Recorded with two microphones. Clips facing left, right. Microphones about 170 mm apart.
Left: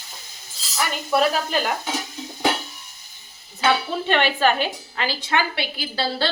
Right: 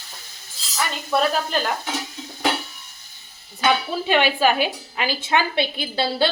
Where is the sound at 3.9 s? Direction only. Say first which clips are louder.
Right 1 dB; 10° right (ahead or behind).